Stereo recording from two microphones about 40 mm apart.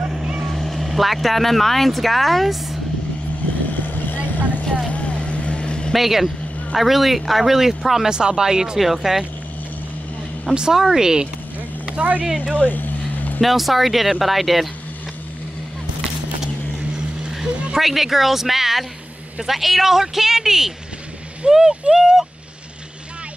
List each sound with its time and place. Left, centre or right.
0.5 s speech: centre
3.8 s vehicle: left
4.8 s vehicle: left
5.9 s speech: centre
8.1 s speech: centre
8.7 s a woman's voice: centre
10.5 s a woman's voice: centre
11.8 s speech: right
12.6 s vehicle: left
13.4 s speech: centre
17.7 s a woman's voice: centre